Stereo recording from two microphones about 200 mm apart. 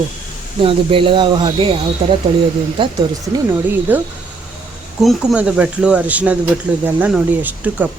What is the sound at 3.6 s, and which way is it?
Speech, 10° right (ahead or behind).